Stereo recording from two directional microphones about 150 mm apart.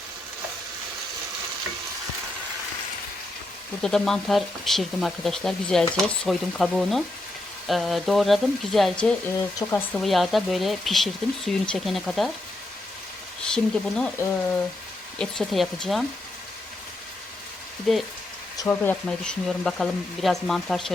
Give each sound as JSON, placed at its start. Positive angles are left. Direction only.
{"t": 3.8, "sound": "speech", "side_deg": 5}
{"t": 9.6, "sound": "speech", "side_deg": 15}
{"t": 10.0, "sound": "speech", "side_deg": 0}
{"t": 13.5, "sound": "speech", "side_deg": 5}
{"t": 15.2, "sound": "speech", "side_deg": 0}
{"t": 17.9, "sound": "speech", "side_deg": 0}
{"t": 18.5, "sound": "speech", "side_deg": 25}
{"t": 18.8, "sound": "speech", "side_deg": 10}